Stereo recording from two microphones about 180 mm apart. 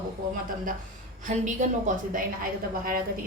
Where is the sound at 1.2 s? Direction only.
45° right (ahead or behind).